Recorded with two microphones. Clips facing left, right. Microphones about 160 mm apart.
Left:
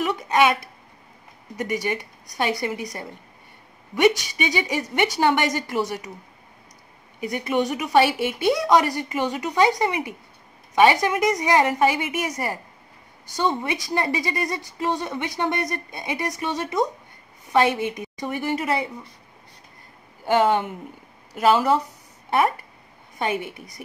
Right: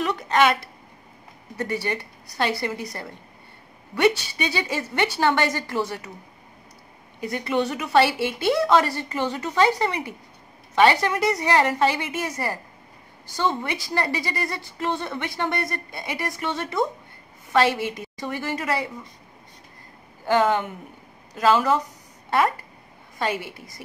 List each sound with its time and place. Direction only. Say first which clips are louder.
0.0 s a sound: left 1 dB; 10° left (ahead or behind)
1.6 s speech: left 1 dB; 15° left (ahead or behind)
7.2 s speech: left 1 dB; 15° left (ahead or behind)
13.3 s speech: left 1 dB; 20° left (ahead or behind)
20.2 s speech: left 1 dB; 20° left (ahead or behind)